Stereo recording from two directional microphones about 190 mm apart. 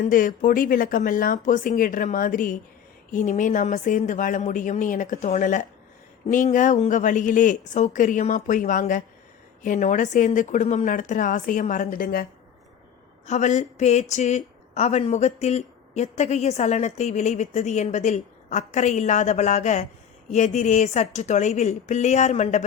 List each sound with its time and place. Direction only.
0.0 s speech: 45° left (ahead or behind)